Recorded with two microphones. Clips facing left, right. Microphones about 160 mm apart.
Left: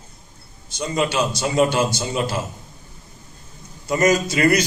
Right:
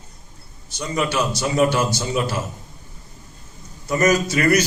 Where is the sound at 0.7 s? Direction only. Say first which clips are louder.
Left 1 dB; 25° left (ahead or behind).